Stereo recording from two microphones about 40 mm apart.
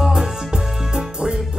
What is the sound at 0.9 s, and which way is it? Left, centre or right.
Music, centre.